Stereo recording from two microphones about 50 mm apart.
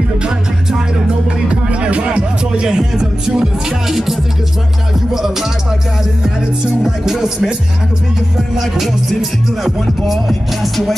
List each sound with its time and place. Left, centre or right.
0.2 s music: centre
6.8 s music: centre
9.6 s music: centre